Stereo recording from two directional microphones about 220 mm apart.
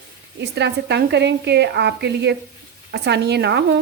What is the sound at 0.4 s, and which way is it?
Speech, 50° right (ahead or behind).